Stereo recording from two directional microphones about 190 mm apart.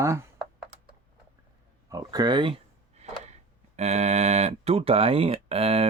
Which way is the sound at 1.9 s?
20° right (ahead or behind).